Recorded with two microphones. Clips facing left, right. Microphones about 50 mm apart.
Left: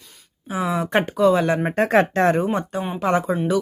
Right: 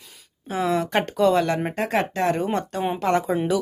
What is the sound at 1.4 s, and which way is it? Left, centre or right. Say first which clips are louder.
Speech: left 3 dB; centre.